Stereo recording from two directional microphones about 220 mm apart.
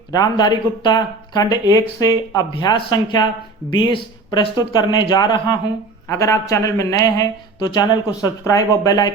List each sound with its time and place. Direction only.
0.1 s a man's voice: 20° left (ahead or behind)